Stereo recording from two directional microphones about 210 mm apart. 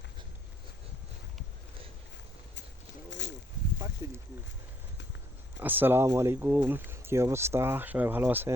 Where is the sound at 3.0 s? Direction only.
55° left (ahead or behind).